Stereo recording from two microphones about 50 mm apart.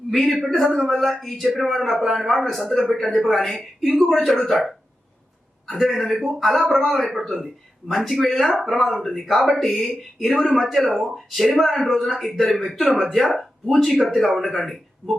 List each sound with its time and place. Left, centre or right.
0.1 s speech: centre
5.7 s speech: centre
10.8 s speech: right
11.1 s speech: centre